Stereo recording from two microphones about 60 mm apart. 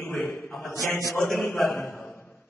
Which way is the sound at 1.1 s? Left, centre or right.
Centre.